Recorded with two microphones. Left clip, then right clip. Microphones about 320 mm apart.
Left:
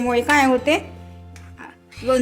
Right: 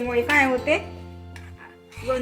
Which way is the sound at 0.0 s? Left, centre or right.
Left.